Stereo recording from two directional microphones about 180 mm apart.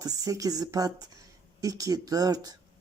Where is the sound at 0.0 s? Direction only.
20° right (ahead or behind).